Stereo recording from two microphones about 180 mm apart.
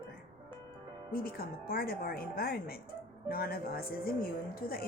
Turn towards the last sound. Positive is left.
turn(degrees=55)  # may be behind; listen again after turning